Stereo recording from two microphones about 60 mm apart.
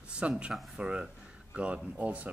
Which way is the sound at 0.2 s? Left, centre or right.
Centre.